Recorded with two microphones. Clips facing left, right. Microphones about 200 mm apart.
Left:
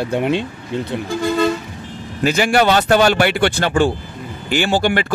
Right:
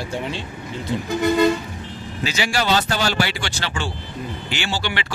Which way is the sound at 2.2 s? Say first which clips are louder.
Left 8 dB; 55° left (ahead or behind).